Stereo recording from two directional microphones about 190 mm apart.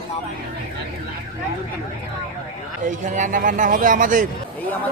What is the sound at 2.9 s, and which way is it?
A man's voice, 40° right (ahead or behind).